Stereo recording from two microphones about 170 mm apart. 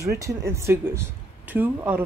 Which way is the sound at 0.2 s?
20° right (ahead or behind).